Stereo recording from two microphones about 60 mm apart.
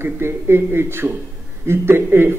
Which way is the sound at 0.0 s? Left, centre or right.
Right.